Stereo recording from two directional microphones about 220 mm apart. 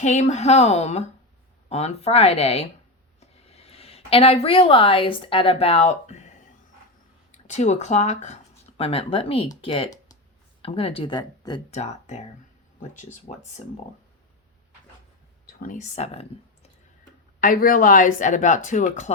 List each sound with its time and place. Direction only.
0.0 s speech: 30° left (ahead or behind)
11.7 s speech: 30° left (ahead or behind)
15.6 s speech: 35° left (ahead or behind)
17.4 s speech: 40° left (ahead or behind)